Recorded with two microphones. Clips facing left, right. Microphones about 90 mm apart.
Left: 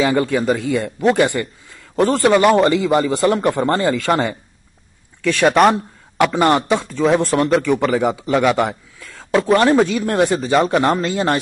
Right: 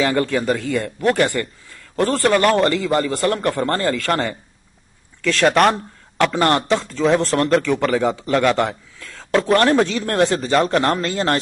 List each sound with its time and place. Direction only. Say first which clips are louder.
0.0 s a man's voice: left 2 dB; 15° left (ahead or behind)